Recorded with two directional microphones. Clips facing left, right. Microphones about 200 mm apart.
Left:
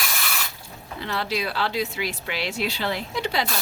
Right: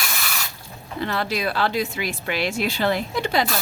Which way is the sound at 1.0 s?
50° right (ahead or behind).